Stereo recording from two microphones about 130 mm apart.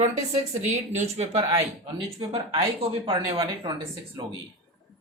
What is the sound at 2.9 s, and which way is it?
Speech, 45° right (ahead or behind).